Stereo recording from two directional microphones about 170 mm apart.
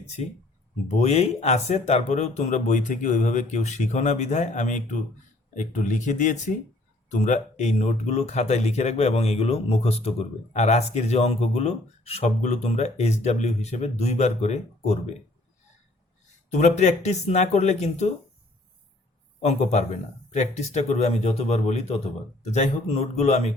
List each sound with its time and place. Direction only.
0.9 s speech: 40° left (ahead or behind)
16.5 s speech: 45° left (ahead or behind)
19.4 s speech: 40° left (ahead or behind)